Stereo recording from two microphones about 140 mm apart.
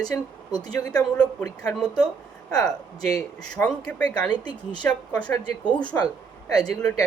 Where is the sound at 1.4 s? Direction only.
10° left (ahead or behind); by 6.7 s 25° left (ahead or behind).